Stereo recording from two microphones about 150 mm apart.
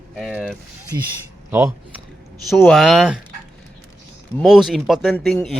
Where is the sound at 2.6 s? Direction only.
Centre (ahead or behind).